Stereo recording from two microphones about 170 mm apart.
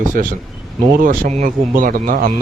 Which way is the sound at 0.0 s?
50° right (ahead or behind).